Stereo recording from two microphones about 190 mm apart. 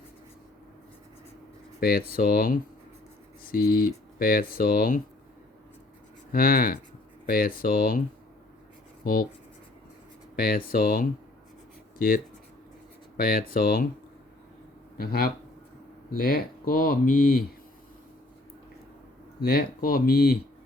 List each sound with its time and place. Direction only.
1.8 s speech: 50° left (ahead or behind)
6.3 s speech: 50° left (ahead or behind)
9.0 s speech: 50° left (ahead or behind)
10.3 s speech: 50° left (ahead or behind)
14.9 s speech: 50° left (ahead or behind)
19.4 s speech: 50° left (ahead or behind)